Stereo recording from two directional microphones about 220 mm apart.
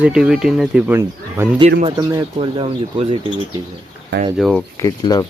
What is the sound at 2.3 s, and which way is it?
Speech, 25° right (ahead or behind).